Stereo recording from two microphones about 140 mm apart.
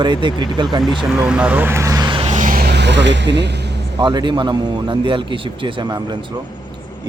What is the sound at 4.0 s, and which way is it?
Speech, 35° right (ahead or behind).